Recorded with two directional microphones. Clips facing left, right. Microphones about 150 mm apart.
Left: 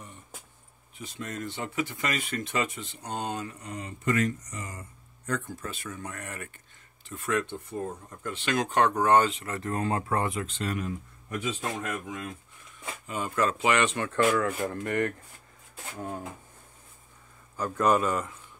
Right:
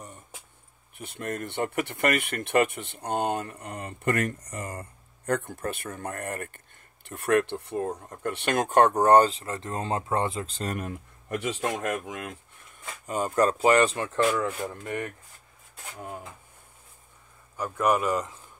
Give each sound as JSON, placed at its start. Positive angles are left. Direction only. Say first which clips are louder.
{"t": 0.9, "sound": "speech", "louder": "right 4 dB", "side_deg": -60}
{"t": 7.1, "sound": "speech", "louder": "right 6 dB", "side_deg": -60}
{"t": 13.0, "sound": "speech", "louder": "right 4 dB", "side_deg": -40}
{"t": 14.6, "sound": "speech", "louder": "left 4 dB", "side_deg": -5}
{"t": 17.6, "sound": "speech", "louder": "even", "side_deg": -10}